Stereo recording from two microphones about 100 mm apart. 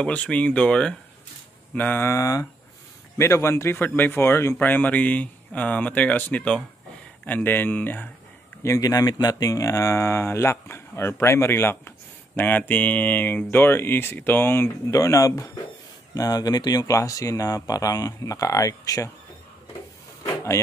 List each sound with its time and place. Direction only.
0.0 s speech: 10° left (ahead or behind)
1.8 s a man's voice: 20° left (ahead or behind)
2.1 s a man's voice: 35° left (ahead or behind)
8.6 s a man's voice: 35° left (ahead or behind)
14.9 s speech: 35° left (ahead or behind)